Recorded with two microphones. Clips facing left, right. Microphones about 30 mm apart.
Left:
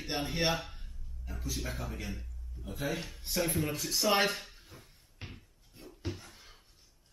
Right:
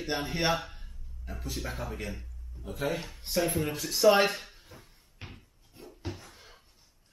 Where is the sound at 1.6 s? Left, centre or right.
Centre.